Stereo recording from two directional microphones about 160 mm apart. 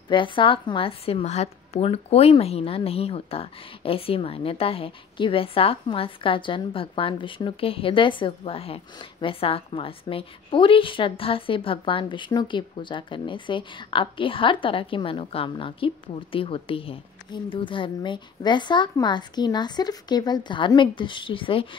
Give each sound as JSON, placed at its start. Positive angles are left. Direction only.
{"t": 0.1, "sound": "a woman's voice", "side_deg": 30}